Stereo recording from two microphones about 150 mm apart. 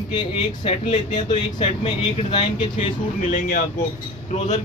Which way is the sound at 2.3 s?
35° left (ahead or behind).